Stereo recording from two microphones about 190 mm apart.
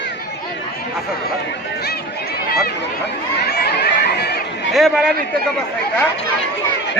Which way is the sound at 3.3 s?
60° left (ahead or behind).